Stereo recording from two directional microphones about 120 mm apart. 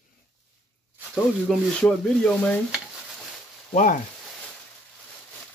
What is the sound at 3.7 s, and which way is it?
Speech, 90° left.